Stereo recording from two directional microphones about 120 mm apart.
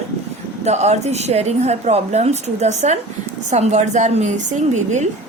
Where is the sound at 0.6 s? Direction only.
65° right (ahead or behind).